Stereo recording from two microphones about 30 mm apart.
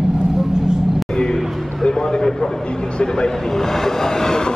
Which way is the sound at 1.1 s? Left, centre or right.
Centre.